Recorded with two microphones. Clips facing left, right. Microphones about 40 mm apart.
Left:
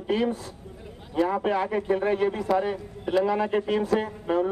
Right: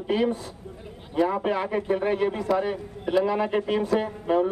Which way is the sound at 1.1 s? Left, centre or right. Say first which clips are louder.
Even; centre.